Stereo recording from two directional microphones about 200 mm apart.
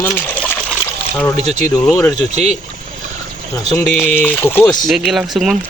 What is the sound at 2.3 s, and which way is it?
Speech, 35° right (ahead or behind).